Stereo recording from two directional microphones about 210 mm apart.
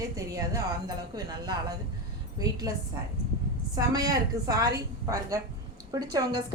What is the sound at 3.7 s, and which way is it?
A woman's voice, 20° right (ahead or behind).